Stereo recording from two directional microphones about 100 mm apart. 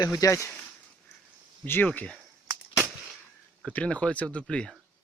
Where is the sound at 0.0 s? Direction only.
35° left (ahead or behind).